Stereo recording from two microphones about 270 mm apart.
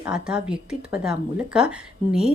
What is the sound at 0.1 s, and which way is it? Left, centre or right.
Speech, centre.